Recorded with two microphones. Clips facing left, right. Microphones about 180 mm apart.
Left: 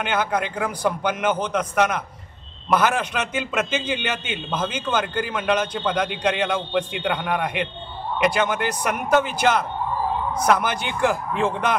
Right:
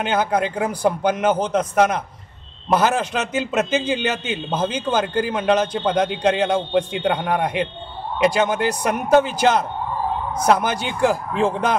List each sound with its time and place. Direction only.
0.0 s a man's voice: 35° right (ahead or behind)